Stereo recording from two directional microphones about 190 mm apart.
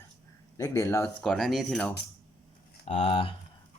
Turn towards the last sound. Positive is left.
turn(degrees=30)  # may be behind; listen again after turning